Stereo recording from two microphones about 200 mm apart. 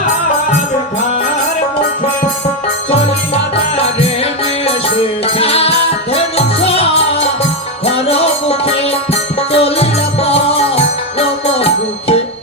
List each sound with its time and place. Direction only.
2.9 s music: 30° left (ahead or behind)